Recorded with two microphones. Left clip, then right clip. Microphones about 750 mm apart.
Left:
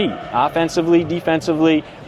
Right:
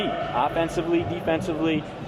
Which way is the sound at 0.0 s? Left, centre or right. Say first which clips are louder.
Left 6 dB; left.